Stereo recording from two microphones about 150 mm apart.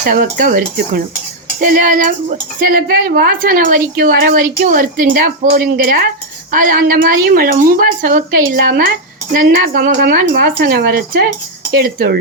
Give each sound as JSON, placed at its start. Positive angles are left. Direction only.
{"t": 0.0, "sound": "speech", "side_deg": -65}